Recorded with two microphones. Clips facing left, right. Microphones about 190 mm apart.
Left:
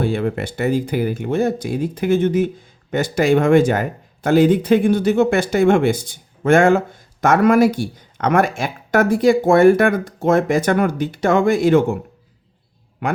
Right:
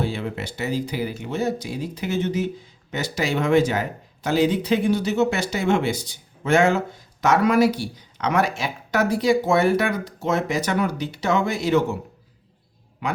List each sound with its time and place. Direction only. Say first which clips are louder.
0.0 s speech: left 7 dB; 55° left (ahead or behind)
13.0 s speech: left 5 dB; 55° left (ahead or behind)